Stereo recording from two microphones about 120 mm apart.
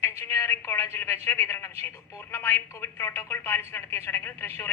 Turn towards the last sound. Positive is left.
turn(degrees=20)  # may be behind; listen again after turning